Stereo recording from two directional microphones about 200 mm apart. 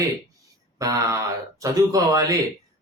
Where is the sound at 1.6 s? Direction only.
15° right (ahead or behind).